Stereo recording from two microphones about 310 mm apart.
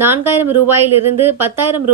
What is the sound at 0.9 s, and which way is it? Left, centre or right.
Speech, right.